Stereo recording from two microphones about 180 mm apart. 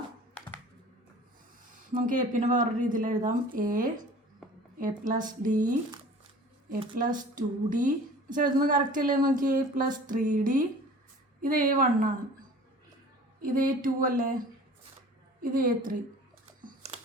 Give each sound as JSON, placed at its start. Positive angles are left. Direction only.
{"t": 1.9, "sound": "a woman's voice", "side_deg": -45}
{"t": 13.4, "sound": "a woman's voice", "side_deg": -50}